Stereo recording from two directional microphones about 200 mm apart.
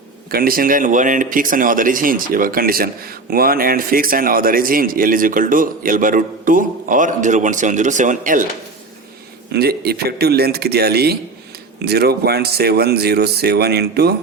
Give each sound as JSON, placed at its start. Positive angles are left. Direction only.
{"t": 0.3, "sound": "speech", "side_deg": -50}
{"t": 9.5, "sound": "speech", "side_deg": -50}